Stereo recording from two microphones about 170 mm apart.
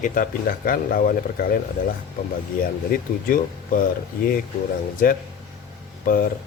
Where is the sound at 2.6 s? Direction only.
60° left (ahead or behind).